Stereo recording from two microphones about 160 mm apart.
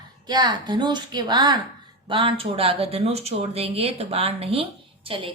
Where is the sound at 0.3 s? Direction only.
25° right (ahead or behind).